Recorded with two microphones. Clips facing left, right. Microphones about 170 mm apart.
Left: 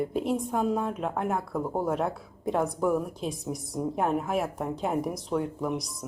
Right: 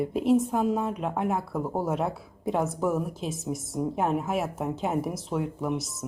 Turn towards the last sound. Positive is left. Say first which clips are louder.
# even
turn(degrees=-5)  # may be behind; listen again after turning